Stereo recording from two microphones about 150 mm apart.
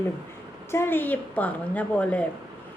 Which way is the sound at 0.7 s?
15° left (ahead or behind).